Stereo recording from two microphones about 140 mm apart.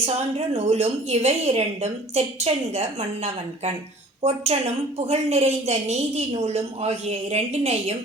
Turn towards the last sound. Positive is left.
turn(degrees=-45)  # may be behind; listen again after turning